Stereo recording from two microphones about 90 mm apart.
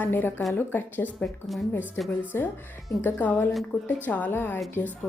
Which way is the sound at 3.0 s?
20° left (ahead or behind).